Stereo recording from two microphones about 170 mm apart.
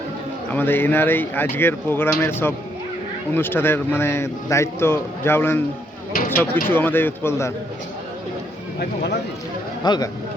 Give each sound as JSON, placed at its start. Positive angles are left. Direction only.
{"t": 0.5, "sound": "speech", "side_deg": 10}
{"t": 9.8, "sound": "speech", "side_deg": 25}